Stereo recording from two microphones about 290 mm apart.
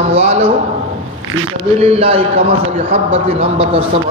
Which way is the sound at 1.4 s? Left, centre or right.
Right.